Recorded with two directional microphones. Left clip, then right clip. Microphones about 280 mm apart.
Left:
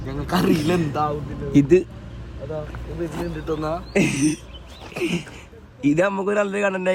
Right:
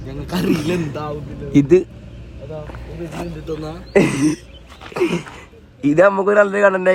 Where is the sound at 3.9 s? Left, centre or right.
Centre.